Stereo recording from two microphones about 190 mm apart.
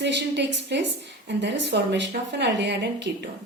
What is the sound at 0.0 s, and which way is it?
A woman's voice, 65° right (ahead or behind).